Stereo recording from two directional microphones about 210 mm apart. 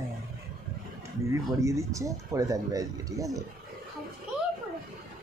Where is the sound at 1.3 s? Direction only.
15° right (ahead or behind).